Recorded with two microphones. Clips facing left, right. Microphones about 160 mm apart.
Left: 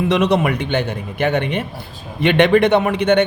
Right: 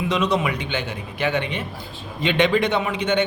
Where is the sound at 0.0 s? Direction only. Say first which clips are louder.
Left 6 dB; 65° left (ahead or behind).